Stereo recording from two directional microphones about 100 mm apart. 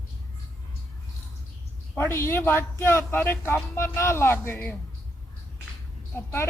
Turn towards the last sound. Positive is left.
turn(degrees=20)  # may be behind; listen again after turning